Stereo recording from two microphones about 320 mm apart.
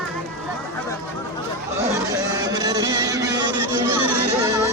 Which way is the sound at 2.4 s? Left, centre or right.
Centre.